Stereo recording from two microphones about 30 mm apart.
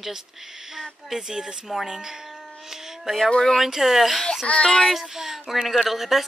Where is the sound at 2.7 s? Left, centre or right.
Centre.